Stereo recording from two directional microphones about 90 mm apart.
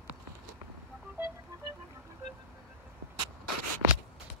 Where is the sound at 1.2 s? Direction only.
20° right (ahead or behind).